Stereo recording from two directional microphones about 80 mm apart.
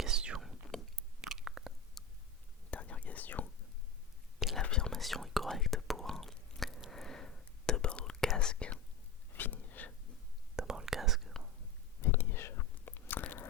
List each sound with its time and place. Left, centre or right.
0.0 s whispering: centre
1.3 s chewing: centre
2.0 s a sound: centre
2.6 s whispering: centre
4.4 s whispering: centre
4.6 s whispering: centre
10.5 s whispering: centre
12.0 s biting: left